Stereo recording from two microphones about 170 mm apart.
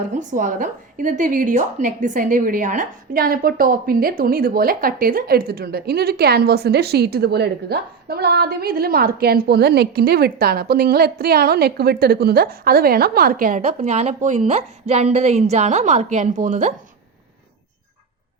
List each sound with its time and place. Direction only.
0.1 s a woman's voice: 45° right (ahead or behind)
13.6 s a woman's voice: 40° right (ahead or behind)